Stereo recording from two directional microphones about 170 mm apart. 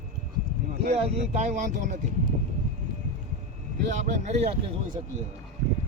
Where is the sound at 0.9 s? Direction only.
40° right (ahead or behind).